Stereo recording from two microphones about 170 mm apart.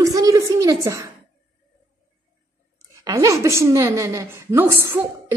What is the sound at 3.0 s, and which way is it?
A woman's voice, 20° right (ahead or behind).